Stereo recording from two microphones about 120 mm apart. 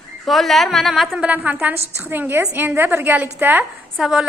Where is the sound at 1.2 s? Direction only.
10° right (ahead or behind).